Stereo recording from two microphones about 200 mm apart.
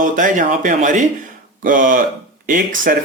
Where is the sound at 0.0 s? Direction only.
40° right (ahead or behind).